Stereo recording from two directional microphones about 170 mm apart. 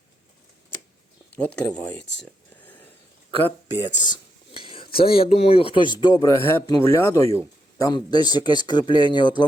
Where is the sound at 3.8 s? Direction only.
25° left (ahead or behind).